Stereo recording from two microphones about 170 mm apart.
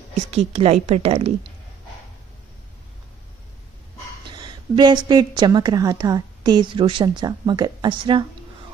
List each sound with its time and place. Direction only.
0.3 s a woman's voice: 35° right (ahead or behind)
4.3 s a woman's voice: 25° right (ahead or behind)